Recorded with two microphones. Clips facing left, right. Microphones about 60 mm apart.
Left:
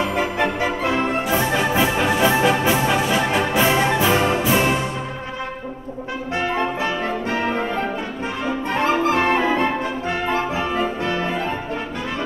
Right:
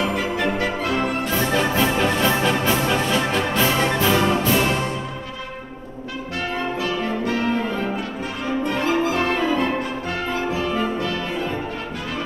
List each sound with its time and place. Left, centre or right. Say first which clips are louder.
0.0 s music: left 1 dB; left
7.0 s music: even; left
8.6 s brass instrument: left 3 dB; left